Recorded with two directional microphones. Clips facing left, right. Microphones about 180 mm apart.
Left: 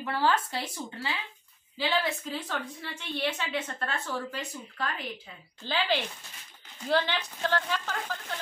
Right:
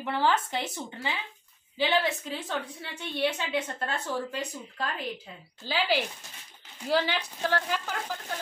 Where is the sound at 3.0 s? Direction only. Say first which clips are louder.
Right 3 dB; 15° right (ahead or behind).